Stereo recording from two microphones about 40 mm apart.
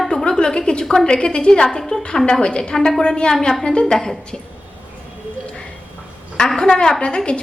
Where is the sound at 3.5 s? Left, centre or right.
Centre.